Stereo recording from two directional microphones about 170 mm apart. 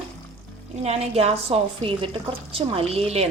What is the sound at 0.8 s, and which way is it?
A woman's voice, 40° right (ahead or behind).